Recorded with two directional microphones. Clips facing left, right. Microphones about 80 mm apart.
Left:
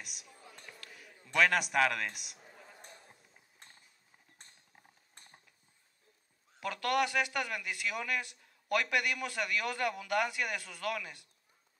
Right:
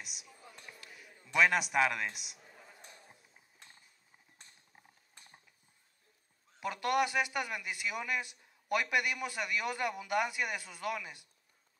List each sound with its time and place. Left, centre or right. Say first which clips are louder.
0.0 s a man's voice: even; centre
3.6 s clip-clop: even; left
6.6 s speech: even; centre